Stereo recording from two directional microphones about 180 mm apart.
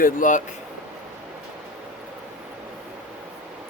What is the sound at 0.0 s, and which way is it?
Speech, 45° left (ahead or behind).